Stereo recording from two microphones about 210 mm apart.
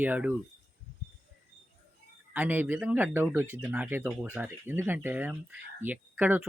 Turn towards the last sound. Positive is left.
turn(degrees=-5)  # may be behind; listen again after turning